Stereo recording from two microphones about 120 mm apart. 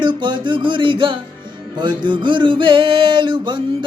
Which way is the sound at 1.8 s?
40° right (ahead or behind).